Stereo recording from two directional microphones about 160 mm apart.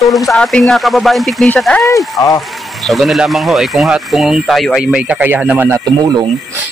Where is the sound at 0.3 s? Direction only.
5° left (ahead or behind).